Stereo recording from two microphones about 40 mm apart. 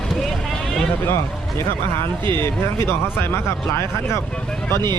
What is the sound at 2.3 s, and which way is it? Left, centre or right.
Speech, left.